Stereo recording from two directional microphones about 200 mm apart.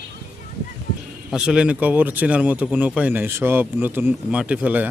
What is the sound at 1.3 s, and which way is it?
Speech, 5° right (ahead or behind).